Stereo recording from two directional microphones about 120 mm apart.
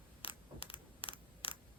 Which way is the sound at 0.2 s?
50° left (ahead or behind).